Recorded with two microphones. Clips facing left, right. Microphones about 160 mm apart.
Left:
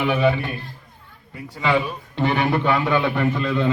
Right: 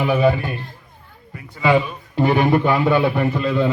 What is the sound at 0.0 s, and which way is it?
Speech, 40° right (ahead or behind).